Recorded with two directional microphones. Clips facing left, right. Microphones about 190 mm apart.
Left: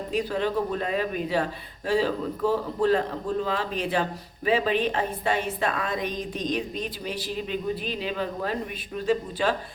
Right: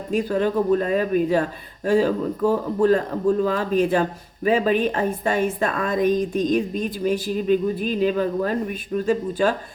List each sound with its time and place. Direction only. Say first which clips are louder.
0.1 s a woman's voice: right 6 dB; 45° right (ahead or behind)